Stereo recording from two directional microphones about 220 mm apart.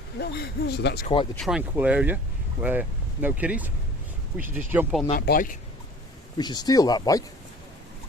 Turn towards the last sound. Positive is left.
turn(degrees=15)  # may be behind; listen again after turning